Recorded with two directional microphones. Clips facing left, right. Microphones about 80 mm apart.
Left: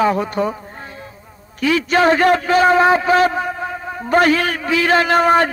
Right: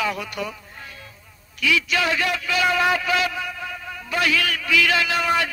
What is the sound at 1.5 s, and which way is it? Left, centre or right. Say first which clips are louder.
A man's voice: left 7 dB; left.